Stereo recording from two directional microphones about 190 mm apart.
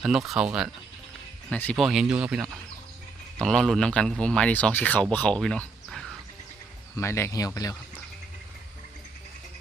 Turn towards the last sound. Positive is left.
turn(degrees=20)  # may be behind; listen again after turning